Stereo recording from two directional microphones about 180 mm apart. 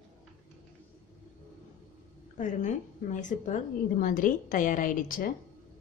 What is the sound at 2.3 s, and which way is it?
A woman's voice, 45° left (ahead or behind).